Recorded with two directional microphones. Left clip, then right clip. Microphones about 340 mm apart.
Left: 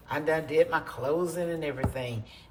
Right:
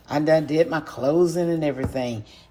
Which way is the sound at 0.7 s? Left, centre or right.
Centre.